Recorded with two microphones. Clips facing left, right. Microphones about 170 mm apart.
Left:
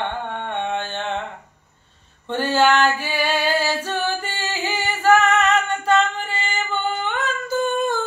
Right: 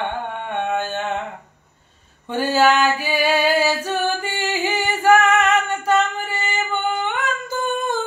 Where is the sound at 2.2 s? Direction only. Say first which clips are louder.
Right 1 dB; 10° right (ahead or behind).